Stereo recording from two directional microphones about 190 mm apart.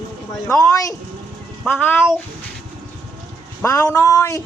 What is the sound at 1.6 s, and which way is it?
Speech, 5° left (ahead or behind).